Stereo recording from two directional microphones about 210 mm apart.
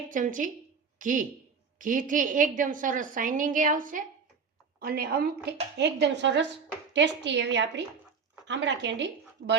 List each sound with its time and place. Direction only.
0.1 s a woman's voice: 40° right (ahead or behind); by 9.0 s 60° right (ahead or behind)